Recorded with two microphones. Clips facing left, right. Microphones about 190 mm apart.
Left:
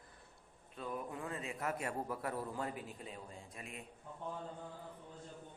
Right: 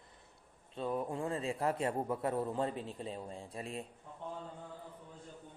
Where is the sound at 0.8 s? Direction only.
30° right (ahead or behind).